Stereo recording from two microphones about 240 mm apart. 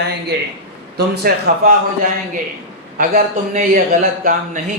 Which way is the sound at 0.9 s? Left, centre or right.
Right.